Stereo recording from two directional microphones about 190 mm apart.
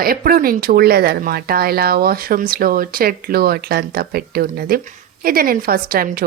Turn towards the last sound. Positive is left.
turn(degrees=-50)  # may be behind; listen again after turning